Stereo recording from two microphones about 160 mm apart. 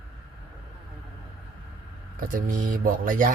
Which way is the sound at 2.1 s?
60° right (ahead or behind).